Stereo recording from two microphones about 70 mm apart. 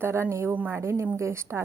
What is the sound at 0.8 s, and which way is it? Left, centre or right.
Speech, right.